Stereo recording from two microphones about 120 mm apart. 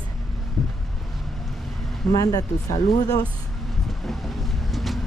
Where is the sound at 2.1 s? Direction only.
30° left (ahead or behind).